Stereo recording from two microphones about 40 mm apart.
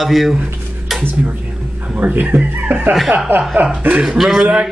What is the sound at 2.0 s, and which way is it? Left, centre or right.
Speech, right.